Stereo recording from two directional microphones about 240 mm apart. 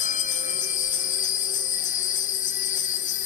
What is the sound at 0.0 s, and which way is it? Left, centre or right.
Music, left.